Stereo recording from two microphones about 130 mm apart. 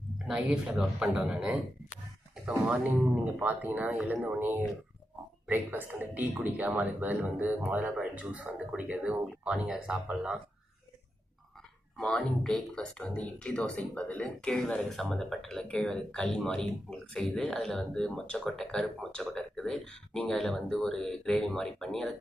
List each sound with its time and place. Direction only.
0.3 s speech: 5° right (ahead or behind)
3.3 s speech: 10° right (ahead or behind)
11.9 s speech: 5° left (ahead or behind)